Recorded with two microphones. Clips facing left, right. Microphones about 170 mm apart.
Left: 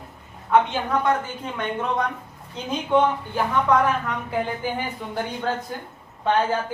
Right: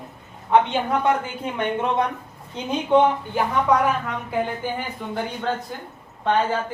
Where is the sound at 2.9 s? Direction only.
10° right (ahead or behind).